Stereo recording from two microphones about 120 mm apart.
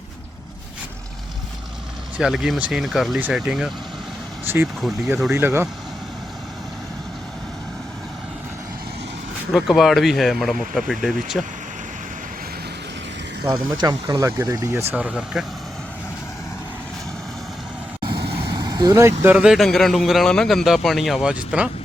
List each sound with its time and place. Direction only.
2.1 s a man's voice: 5° right (ahead or behind)
3.2 s speech: 10° right (ahead or behind)
4.4 s speech: 20° right (ahead or behind)
9.5 s a man's voice: centre (ahead or behind)
13.7 s speech: 35° right (ahead or behind)
15.3 s a man's voice: 5° right (ahead or behind)
18.0 s vehicle: 40° right (ahead or behind)
19.2 s a man's voice: 10° right (ahead or behind)